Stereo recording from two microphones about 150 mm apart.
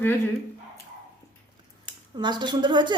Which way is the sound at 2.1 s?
30° right (ahead or behind).